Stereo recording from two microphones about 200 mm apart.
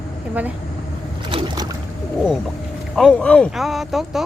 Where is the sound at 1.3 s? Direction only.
25° right (ahead or behind).